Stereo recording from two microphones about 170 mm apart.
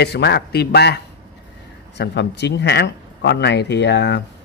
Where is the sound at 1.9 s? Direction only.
85° left.